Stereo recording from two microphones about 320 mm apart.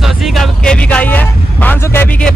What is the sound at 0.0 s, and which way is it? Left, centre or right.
Speech, centre.